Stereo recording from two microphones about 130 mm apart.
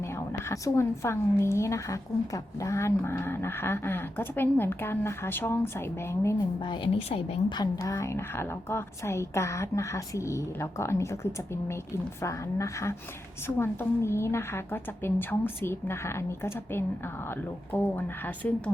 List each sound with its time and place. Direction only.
0.4 s a woman's voice: 20° left (ahead or behind)
6.7 s a woman's voice: 40° left (ahead or behind)
7.6 s a woman's voice: 25° left (ahead or behind)